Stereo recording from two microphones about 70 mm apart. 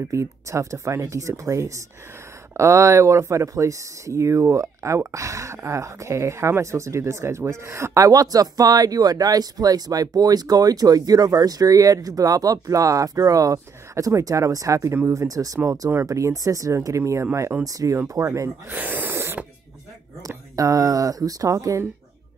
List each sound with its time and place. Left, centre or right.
0.1 s speech: right
8.0 s speech: right
17.6 s speech: right
18.7 s speech: right
20.2 s speech: right